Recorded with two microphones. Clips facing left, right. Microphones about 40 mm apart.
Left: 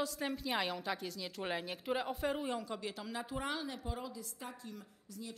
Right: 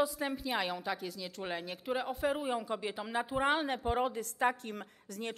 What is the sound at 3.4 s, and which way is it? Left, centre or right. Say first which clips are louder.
A woman's voice: right 9 dB; right.